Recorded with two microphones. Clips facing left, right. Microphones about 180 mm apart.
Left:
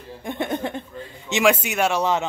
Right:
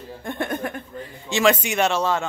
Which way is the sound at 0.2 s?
20° left (ahead or behind).